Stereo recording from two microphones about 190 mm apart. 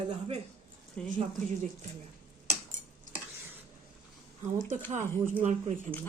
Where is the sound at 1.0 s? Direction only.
5° left (ahead or behind).